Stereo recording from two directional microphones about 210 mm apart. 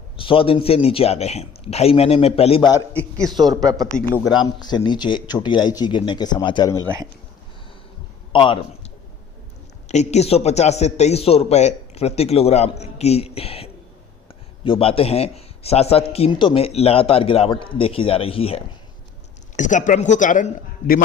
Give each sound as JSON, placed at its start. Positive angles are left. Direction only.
{"t": 0.2, "sound": "speech", "side_deg": 25}
{"t": 2.6, "sound": "a man's voice", "side_deg": 10}
{"t": 3.2, "sound": "speech", "side_deg": -20}
{"t": 3.8, "sound": "a man's voice", "side_deg": 5}
{"t": 4.3, "sound": "speech", "side_deg": 20}
{"t": 8.3, "sound": "a man's voice", "side_deg": 25}
{"t": 9.9, "sound": "speech", "side_deg": 35}